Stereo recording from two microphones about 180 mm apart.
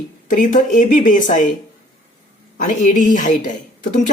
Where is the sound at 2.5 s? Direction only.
45° left (ahead or behind).